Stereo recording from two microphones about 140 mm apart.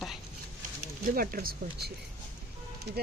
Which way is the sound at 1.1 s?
90° right.